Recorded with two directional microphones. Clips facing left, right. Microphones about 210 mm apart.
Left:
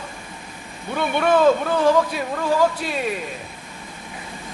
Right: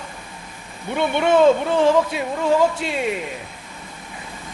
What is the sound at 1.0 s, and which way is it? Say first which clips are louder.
Speech: right 2 dB; 25° right (ahead or behind).